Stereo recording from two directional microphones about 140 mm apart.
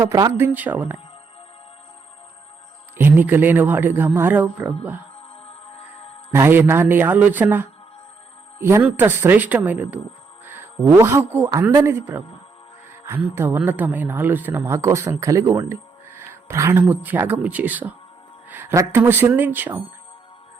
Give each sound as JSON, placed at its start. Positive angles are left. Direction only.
{"t": 0.0, "sound": "speech", "side_deg": -25}
{"t": 0.4, "sound": "speech", "side_deg": -10}
{"t": 3.0, "sound": "speech", "side_deg": -15}
{"t": 5.5, "sound": "music", "side_deg": 45}
{"t": 6.3, "sound": "a man's voice", "side_deg": -15}